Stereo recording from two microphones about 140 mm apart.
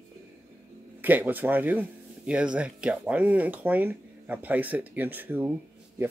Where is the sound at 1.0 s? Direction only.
15° right (ahead or behind).